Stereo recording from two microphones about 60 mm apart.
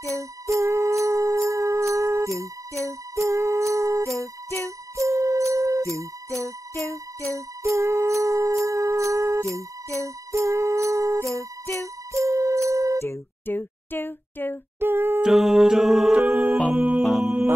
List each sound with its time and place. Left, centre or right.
0.0 s music: right
2.8 s jingle bell: right
7.3 s music: right
13.5 s a sound: left
14.8 s humming: right
15.2 s a capella: centre
16.3 s music: right
17.0 s music: centre